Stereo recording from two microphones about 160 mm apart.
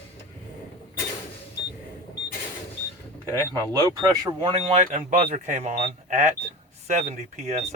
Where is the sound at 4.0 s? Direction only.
25° right (ahead or behind).